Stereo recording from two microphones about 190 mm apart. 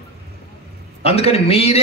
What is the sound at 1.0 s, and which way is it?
Speech, 30° left (ahead or behind).